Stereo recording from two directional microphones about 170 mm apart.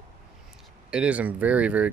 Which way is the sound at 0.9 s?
5° right (ahead or behind).